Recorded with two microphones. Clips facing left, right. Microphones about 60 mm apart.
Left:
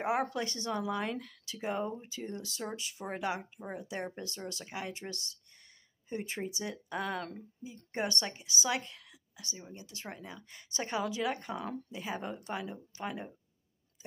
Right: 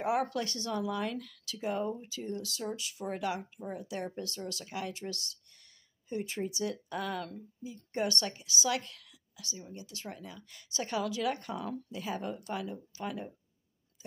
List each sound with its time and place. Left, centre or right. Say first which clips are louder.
0.0 s speech: right 1 dB; left